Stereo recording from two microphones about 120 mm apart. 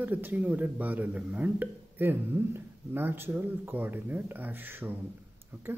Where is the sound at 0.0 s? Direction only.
15° right (ahead or behind).